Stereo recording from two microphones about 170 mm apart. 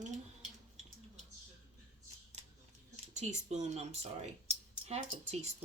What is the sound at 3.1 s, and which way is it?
Speech, 40° right (ahead or behind).